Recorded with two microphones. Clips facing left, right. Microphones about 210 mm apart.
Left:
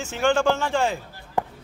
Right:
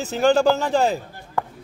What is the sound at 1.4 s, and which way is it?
Chop, 15° left (ahead or behind).